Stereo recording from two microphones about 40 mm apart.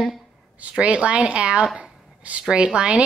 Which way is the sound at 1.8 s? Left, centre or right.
Right.